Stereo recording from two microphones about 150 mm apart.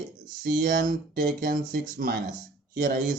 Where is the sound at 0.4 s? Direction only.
70° right (ahead or behind).